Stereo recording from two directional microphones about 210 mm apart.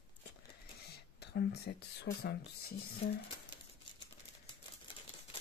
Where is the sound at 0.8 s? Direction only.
50° left (ahead or behind).